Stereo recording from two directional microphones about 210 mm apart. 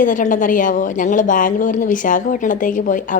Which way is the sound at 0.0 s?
40° left (ahead or behind).